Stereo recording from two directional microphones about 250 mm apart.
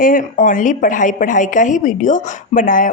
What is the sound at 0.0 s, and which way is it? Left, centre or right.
A woman's voice, left.